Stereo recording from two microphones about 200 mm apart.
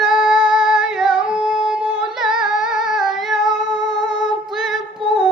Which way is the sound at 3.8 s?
65° left (ahead or behind).